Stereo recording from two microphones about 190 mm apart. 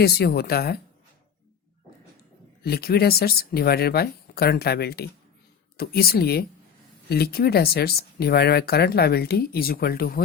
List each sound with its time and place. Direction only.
0.0 s speech: 55° left (ahead or behind)
2.6 s speech: 55° left (ahead or behind)